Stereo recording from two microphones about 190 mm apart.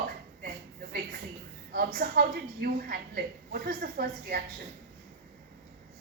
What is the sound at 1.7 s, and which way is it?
Speech, 55° right (ahead or behind).